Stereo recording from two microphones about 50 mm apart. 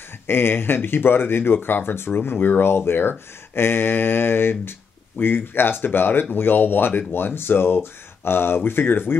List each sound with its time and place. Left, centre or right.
0.3 s speech: left